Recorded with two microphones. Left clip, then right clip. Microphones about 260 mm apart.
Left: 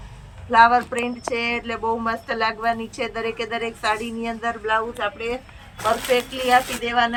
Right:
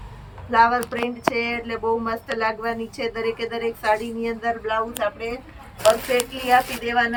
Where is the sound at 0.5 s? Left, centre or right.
Centre.